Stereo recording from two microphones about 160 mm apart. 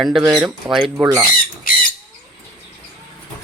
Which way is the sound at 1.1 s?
25° right (ahead or behind).